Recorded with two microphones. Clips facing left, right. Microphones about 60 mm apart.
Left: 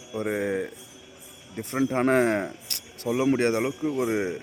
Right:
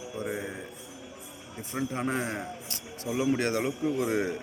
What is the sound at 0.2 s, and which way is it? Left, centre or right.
Speech, left.